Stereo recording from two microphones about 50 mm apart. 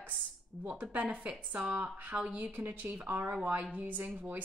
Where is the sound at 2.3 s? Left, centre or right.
Right.